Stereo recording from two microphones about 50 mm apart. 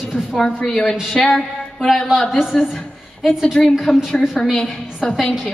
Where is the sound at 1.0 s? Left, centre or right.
Centre.